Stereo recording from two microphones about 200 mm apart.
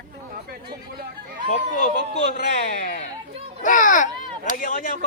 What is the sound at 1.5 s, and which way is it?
Speech, 40° left (ahead or behind).